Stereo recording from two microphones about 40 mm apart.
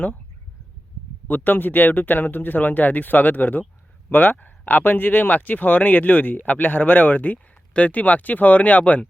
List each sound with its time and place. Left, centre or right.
1.3 s speech: left